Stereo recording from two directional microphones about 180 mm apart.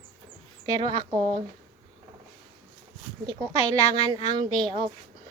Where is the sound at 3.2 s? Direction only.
20° right (ahead or behind).